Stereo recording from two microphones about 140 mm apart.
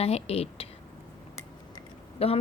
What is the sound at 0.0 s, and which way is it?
Speech, 45° left (ahead or behind).